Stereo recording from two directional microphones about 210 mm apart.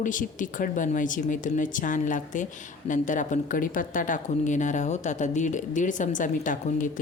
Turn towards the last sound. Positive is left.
turn(degrees=40)  # may be behind; listen again after turning